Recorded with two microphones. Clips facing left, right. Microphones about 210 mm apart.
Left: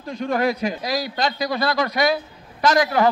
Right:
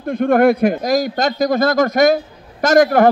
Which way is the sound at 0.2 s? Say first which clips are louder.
Right 9 dB; 55° right (ahead or behind).